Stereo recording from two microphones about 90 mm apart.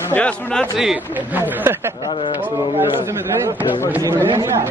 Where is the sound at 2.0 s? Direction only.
65° left (ahead or behind).